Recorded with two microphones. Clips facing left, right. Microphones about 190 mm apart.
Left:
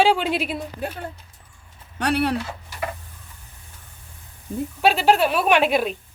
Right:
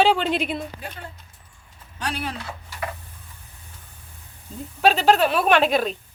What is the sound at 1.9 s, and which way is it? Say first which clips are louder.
Speech: left 8 dB; 65° left (ahead or behind).